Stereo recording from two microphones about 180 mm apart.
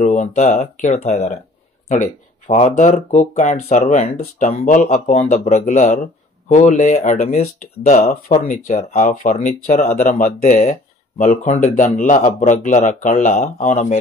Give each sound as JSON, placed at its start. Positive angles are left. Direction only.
{"t": 0.0, "sound": "speech", "side_deg": 40}